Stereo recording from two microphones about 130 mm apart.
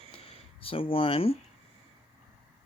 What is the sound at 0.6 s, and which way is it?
Speech, 45° left (ahead or behind).